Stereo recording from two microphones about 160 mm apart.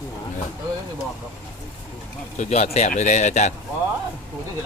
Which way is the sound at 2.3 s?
45° left (ahead or behind).